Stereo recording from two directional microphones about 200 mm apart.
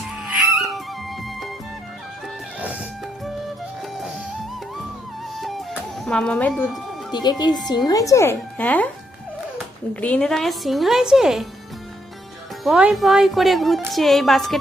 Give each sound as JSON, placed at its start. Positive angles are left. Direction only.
{"t": 0.5, "sound": "music", "side_deg": 0}
{"t": 5.4, "sound": "music", "side_deg": 0}
{"t": 6.1, "sound": "a woman's voice", "side_deg": 5}
{"t": 7.1, "sound": "speech", "side_deg": 20}
{"t": 9.9, "sound": "a woman's voice", "side_deg": 5}
{"t": 12.6, "sound": "a woman's voice", "side_deg": 0}